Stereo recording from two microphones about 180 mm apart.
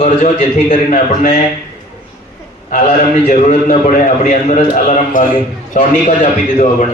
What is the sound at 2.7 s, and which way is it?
A man's voice, 40° left (ahead or behind).